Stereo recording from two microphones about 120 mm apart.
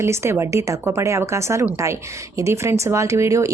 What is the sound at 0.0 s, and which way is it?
A woman's voice, 20° right (ahead or behind).